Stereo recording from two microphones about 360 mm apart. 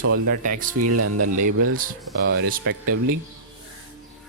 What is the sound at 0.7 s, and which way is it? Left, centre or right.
Speech, right.